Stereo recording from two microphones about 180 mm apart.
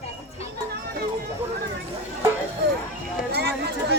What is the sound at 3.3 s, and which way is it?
Chatter, 65° right (ahead or behind).